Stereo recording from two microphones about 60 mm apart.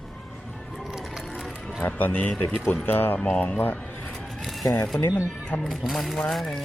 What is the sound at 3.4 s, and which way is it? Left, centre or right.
Speech, left.